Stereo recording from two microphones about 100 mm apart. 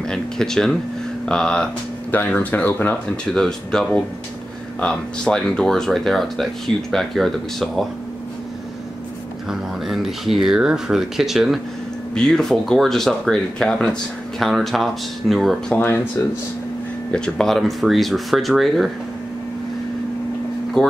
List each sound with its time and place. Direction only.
0.0 s speech: 5° left (ahead or behind)
2.0 s speech: 20° left (ahead or behind)
3.3 s speech: 5° left (ahead or behind)
9.5 s speech: 5° right (ahead or behind)
12.1 s speech: 5° left (ahead or behind)
15.7 s speech: 20° left (ahead or behind)
17.1 s speech: 5° left (ahead or behind)
20.8 s speech: 5° left (ahead or behind)